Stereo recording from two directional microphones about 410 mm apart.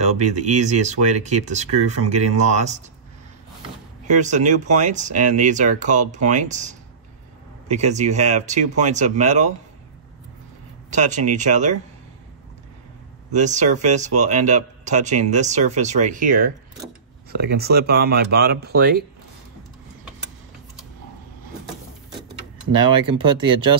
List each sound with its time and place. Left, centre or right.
0.0 s speech: centre
4.0 s speech: centre
10.9 s speech: centre
13.3 s speech: centre
23.4 s speech: centre